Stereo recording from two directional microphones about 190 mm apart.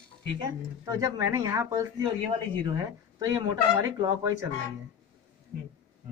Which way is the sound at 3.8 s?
20° right (ahead or behind).